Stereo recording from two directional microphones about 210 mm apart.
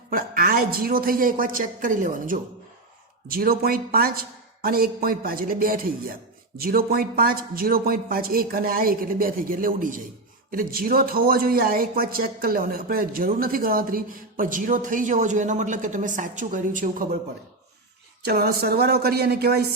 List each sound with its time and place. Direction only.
0.1 s speech: 45° right (ahead or behind)
18.3 s speech: 50° right (ahead or behind)